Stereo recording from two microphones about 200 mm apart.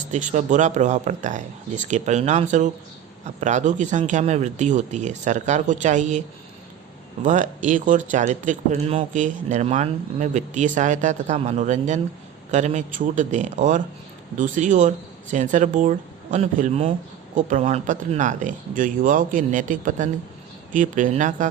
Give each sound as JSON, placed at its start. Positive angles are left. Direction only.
{"t": 0.1, "sound": "speech", "side_deg": -35}